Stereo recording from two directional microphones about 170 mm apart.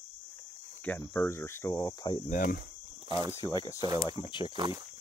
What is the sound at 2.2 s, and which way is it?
Speech, 50° left (ahead or behind).